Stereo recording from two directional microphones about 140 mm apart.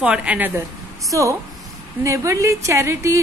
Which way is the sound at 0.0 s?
10° right (ahead or behind).